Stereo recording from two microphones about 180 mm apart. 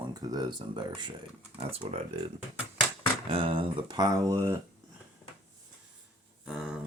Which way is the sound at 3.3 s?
30° right (ahead or behind).